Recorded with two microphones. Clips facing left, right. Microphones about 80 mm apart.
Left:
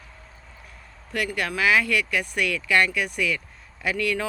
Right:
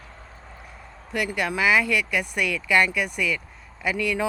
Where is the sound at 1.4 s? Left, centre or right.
Centre.